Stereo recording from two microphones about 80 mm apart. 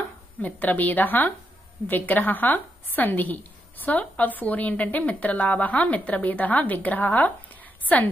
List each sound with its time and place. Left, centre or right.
0.4 s a woman's voice: left